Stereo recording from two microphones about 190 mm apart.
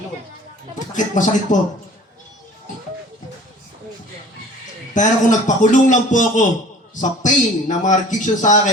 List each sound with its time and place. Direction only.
0.9 s a man's voice: 40° left (ahead or behind)
4.9 s a man's voice: 40° left (ahead or behind)